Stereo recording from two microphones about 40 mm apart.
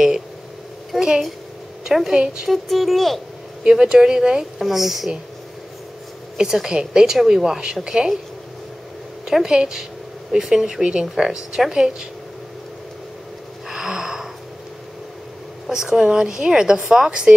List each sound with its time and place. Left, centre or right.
0.9 s a sound: centre
1.9 s a woman's voice: centre
2.4 s music: centre
3.6 s a woman's voice: centre
6.3 s a woman's voice: centre
9.2 s a woman's voice: centre
13.7 s a sound: centre
15.6 s a woman's voice: centre